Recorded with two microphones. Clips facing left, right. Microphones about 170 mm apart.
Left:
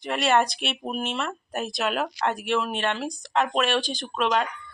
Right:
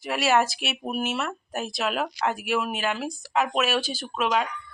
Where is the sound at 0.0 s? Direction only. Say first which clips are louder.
Even; 5° right (ahead or behind).